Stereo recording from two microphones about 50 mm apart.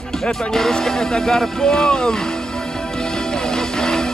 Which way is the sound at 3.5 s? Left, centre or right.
Centre.